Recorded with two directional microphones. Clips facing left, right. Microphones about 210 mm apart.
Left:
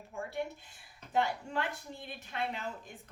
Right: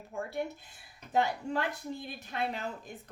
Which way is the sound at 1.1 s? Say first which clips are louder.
Right 2 dB; 40° right (ahead or behind).